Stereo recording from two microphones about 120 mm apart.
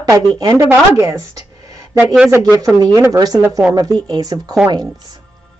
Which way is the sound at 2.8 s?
30° right (ahead or behind).